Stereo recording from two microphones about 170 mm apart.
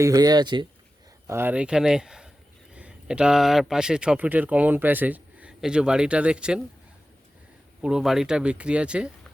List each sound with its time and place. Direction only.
0.0 s speech: 20° right (ahead or behind)
1.3 s speech: 10° right (ahead or behind)
7.8 s speech: 5° right (ahead or behind)